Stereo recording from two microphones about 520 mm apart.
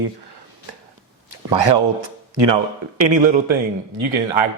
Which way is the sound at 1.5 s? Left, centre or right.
Right.